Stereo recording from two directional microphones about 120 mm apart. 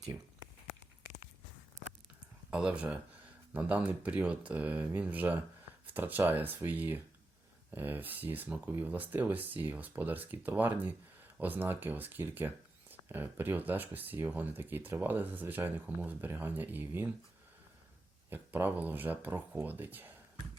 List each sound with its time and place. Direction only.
2.5 s speech: 10° right (ahead or behind)
18.3 s speech: 15° right (ahead or behind)